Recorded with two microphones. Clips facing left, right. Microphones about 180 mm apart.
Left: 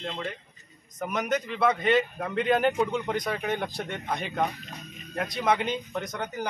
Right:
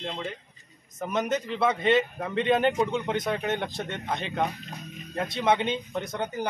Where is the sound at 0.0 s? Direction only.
Centre (ahead or behind).